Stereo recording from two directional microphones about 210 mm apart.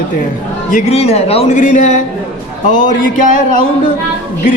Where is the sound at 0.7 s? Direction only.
30° left (ahead or behind).